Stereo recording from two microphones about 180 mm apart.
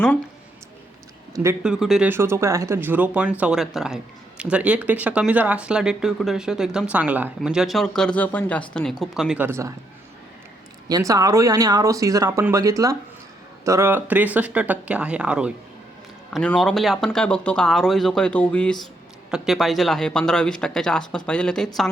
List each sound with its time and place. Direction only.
1.6 s speech: 5° right (ahead or behind)
10.8 s speech: 20° right (ahead or behind); by 21.7 s 5° left (ahead or behind)